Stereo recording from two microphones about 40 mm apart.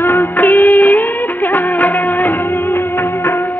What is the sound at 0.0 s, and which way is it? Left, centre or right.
Music of bollywood, left.